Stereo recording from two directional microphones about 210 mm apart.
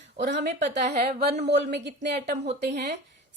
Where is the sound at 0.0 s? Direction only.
55° right (ahead or behind).